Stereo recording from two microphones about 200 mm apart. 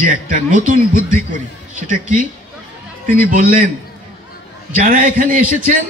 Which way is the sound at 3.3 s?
45° right (ahead or behind).